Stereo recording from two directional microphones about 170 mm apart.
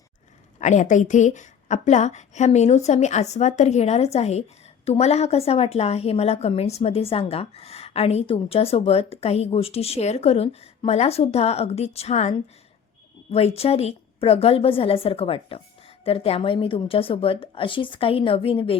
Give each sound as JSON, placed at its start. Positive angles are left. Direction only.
{"t": 0.6, "sound": "a woman's voice", "side_deg": 45}
{"t": 13.3, "sound": "a woman's voice", "side_deg": 35}